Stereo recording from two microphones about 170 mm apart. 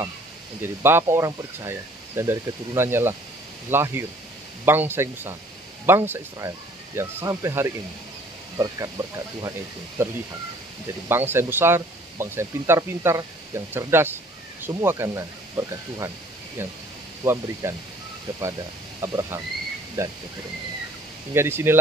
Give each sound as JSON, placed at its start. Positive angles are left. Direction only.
{"t": 0.6, "sound": "speech", "side_deg": -15}
{"t": 17.2, "sound": "speech", "side_deg": -15}
{"t": 18.9, "sound": "speech", "side_deg": -15}
{"t": 21.3, "sound": "speech", "side_deg": -15}